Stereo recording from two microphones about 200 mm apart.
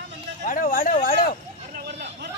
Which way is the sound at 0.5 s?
45° left (ahead or behind).